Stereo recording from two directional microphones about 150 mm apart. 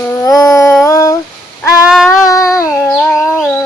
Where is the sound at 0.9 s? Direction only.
20° left (ahead or behind).